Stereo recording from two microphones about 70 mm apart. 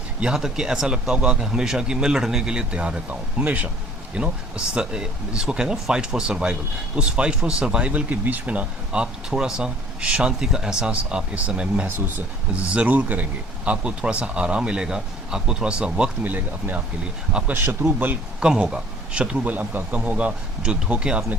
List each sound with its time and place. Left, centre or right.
0.2 s speech: centre
11.9 s speech: right; by 16.0 s centre
16.2 s speech: right
18.3 s speech: centre